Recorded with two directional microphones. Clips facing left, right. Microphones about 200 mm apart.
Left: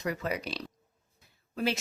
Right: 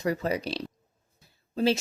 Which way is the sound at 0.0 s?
30° right (ahead or behind).